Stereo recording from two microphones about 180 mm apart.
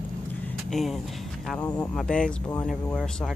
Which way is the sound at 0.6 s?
Centre (ahead or behind).